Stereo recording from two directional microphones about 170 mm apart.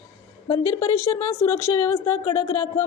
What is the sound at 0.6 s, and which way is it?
Speech, 15° left (ahead or behind).